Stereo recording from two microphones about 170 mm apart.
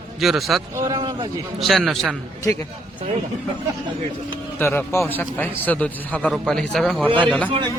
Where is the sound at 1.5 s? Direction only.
Centre (ahead or behind).